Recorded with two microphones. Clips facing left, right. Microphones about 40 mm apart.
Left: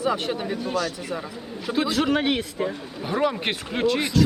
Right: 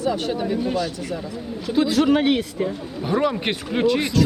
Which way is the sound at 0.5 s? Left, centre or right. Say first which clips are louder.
Right 3 dB; centre.